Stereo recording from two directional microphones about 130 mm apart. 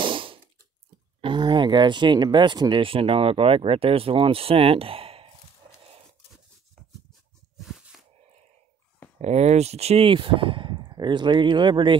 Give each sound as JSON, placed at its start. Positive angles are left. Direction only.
{"t": 0.0, "sound": "a sound", "side_deg": -40}
{"t": 1.2, "sound": "speech", "side_deg": -35}
{"t": 9.2, "sound": "speech", "side_deg": -60}